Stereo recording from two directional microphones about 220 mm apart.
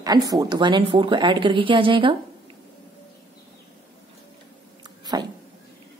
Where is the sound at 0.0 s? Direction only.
15° right (ahead or behind).